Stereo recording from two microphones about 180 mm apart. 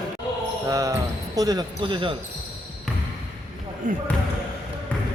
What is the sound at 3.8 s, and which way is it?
Speech, 50° right (ahead or behind).